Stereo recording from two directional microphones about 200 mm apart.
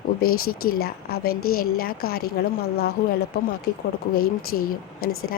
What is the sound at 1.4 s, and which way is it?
Speech, 90° left.